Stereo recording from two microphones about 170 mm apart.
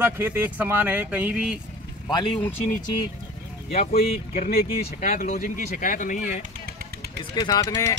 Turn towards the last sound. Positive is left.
turn(degrees=20)  # may be behind; listen again after turning